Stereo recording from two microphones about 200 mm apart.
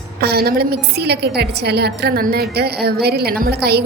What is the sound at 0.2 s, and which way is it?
A woman's voice, 55° right (ahead or behind).